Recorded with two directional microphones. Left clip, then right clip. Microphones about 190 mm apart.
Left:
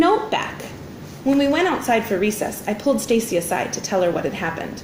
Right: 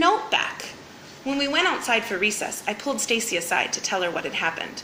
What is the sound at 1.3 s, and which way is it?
A woman's voice, 15° right (ahead or behind).